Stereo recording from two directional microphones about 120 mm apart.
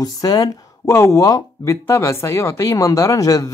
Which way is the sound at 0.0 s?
30° left (ahead or behind).